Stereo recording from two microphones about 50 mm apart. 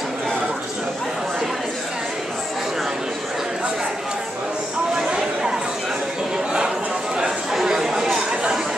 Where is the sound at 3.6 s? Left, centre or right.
Centre.